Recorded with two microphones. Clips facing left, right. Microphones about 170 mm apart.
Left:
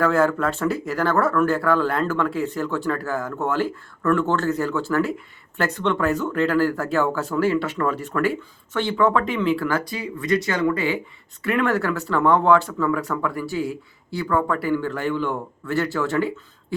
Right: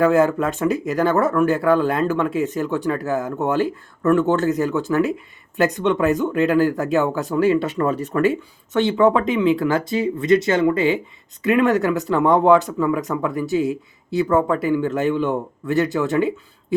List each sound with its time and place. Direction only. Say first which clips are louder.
0.0 s speech: right 3 dB; 15° right (ahead or behind)